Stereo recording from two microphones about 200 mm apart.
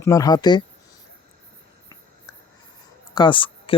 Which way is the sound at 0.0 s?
15° left (ahead or behind).